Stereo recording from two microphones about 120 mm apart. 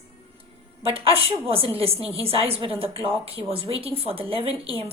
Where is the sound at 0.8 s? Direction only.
50° right (ahead or behind).